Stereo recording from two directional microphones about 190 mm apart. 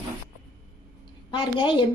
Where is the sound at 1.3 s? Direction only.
25° left (ahead or behind).